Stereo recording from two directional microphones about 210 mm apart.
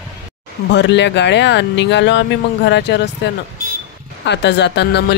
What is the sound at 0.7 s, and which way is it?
Speech, 55° left (ahead or behind).